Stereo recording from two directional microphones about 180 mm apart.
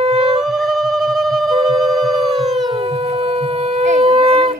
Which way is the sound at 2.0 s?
Centre (ahead or behind).